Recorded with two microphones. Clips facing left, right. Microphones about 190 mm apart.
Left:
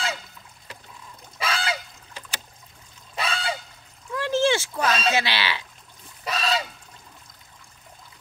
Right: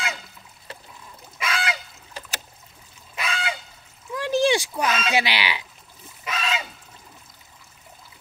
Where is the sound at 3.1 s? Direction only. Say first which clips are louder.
Left 1 dB; 30° left (ahead or behind).